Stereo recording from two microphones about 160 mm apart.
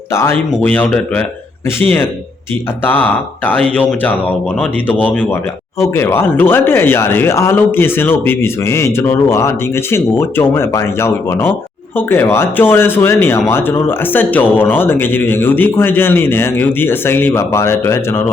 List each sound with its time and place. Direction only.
0.1 s a man's voice: 15° left (ahead or behind)
2.8 s a man's voice: 10° left (ahead or behind)